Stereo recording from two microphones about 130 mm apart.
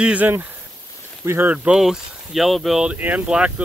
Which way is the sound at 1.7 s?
5° right (ahead or behind).